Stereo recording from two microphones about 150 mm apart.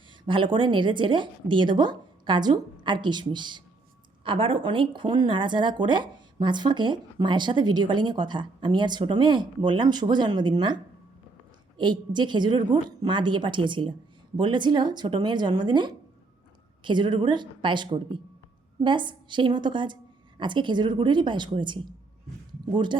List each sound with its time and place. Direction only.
0.3 s speech: 35° right (ahead or behind)
11.8 s speech: 30° right (ahead or behind)